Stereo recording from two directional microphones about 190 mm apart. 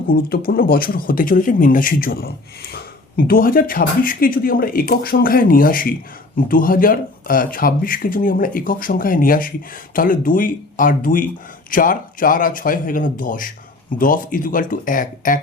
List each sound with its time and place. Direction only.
0.1 s speech: 50° left (ahead or behind)